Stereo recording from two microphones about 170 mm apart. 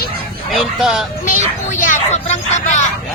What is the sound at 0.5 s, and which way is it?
Speech, centre (ahead or behind).